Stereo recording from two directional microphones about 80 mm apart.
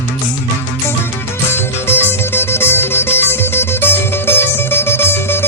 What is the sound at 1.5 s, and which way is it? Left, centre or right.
Music, left.